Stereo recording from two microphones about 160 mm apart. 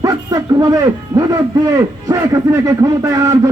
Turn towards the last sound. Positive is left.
turn(degrees=-20)  # may be behind; listen again after turning